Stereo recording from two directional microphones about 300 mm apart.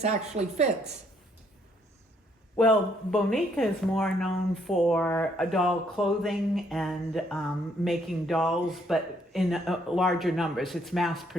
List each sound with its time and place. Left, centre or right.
0.0 s speech: right
2.6 s speech: centre